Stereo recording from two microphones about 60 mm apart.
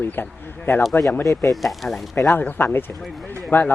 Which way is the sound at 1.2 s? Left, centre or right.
Left.